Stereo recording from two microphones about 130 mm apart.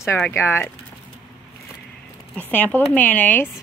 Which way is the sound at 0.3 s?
20° left (ahead or behind).